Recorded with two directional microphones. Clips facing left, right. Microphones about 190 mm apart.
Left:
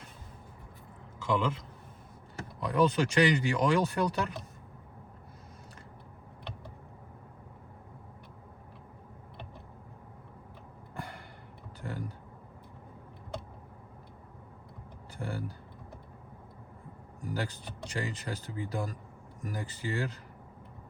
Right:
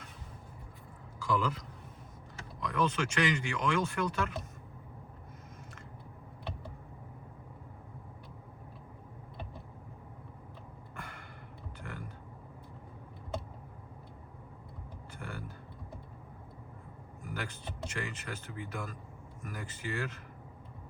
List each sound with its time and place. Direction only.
1.2 s a man's voice: 25° left (ahead or behind)
10.9 s a sound: 35° left (ahead or behind)
15.2 s typing: 30° left (ahead or behind)
17.2 s speech: 35° left (ahead or behind)